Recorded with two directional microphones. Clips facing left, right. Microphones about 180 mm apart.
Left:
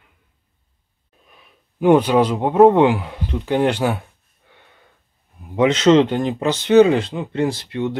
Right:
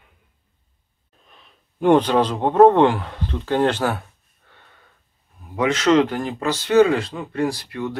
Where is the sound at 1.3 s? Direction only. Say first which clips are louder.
Left 2 dB; 10° left (ahead or behind).